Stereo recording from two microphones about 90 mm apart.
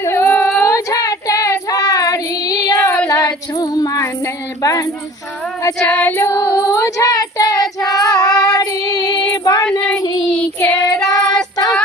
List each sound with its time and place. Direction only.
0.0 s child singing: 30° left (ahead or behind); by 2.9 s 45° left (ahead or behind)
3.1 s music: 45° left (ahead or behind)
4.6 s a sound: 40° left (ahead or behind)
5.8 s female singing: 20° left (ahead or behind)
6.7 s child singing: 35° left (ahead or behind)
10.2 s child singing: 10° left (ahead or behind)
10.8 s child singing: 45° left (ahead or behind)